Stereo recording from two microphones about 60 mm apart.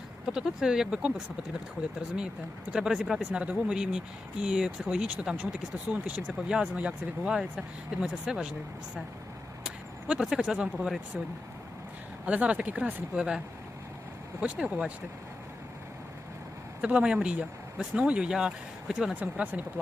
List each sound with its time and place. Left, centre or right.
0.3 s speech: centre
3.3 s speech: right
5.9 s speech: right
9.6 s speech: centre
12.2 s speech: right
14.4 s speech: centre
16.8 s speech: centre
19.1 s speech: right